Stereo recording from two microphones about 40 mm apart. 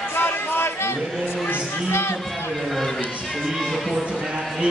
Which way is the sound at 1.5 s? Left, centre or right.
Left.